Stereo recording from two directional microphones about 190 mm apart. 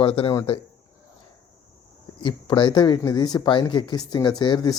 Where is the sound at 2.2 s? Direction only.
25° left (ahead or behind).